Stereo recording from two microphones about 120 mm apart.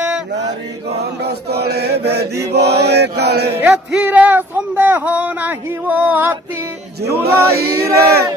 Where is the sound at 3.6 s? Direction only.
15° right (ahead or behind).